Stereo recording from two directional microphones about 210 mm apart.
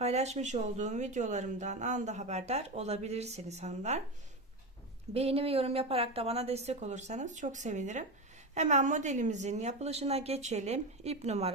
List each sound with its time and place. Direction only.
0.0 s speech: 30° right (ahead or behind)
5.1 s speech: 30° right (ahead or behind)